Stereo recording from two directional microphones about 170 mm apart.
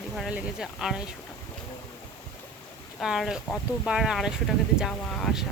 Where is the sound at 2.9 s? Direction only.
Centre (ahead or behind).